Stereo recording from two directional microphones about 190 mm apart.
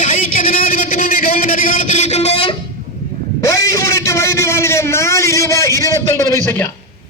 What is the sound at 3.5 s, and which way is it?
A man's voice, 15° left (ahead or behind).